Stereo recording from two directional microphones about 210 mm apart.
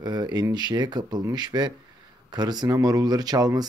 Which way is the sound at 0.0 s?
20° right (ahead or behind).